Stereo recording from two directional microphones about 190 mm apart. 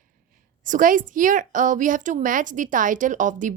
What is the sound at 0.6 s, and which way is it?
A woman's voice, 45° right (ahead or behind).